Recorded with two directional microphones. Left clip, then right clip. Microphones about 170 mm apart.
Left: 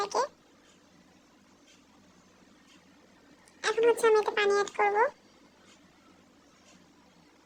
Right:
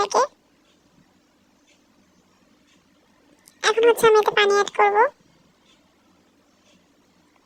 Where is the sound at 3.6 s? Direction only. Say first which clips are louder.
Right 8 dB; 35° right (ahead or behind).